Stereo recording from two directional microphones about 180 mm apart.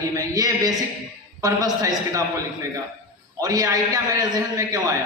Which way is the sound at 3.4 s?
20° right (ahead or behind).